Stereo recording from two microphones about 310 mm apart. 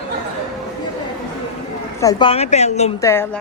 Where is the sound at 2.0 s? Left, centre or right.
Centre.